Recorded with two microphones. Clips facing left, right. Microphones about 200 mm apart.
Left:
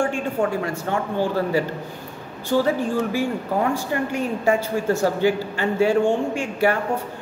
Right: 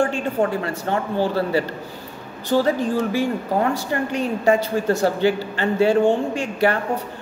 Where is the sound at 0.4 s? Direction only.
35° right (ahead or behind).